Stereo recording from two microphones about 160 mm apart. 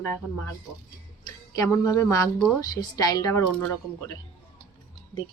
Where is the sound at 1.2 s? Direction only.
25° left (ahead or behind).